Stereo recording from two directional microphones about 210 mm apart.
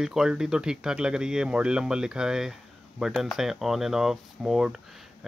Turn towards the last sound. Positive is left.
turn(degrees=0)  # may be behind; listen again after turning